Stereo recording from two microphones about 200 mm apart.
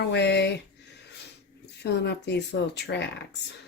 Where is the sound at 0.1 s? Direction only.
55° left (ahead or behind).